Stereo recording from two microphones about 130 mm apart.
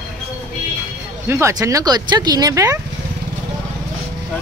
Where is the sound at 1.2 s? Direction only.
20° right (ahead or behind).